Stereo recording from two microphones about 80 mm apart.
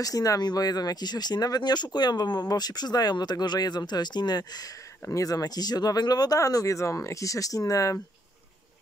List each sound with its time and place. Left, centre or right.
0.0 s speech: left